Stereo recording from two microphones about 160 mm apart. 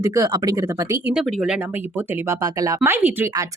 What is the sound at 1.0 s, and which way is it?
Speech, 5° right (ahead or behind).